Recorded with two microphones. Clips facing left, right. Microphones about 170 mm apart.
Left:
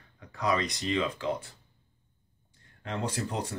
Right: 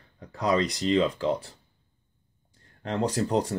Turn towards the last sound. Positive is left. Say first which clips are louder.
# right 8 dB
turn(degrees=-40)  # may be behind; listen again after turning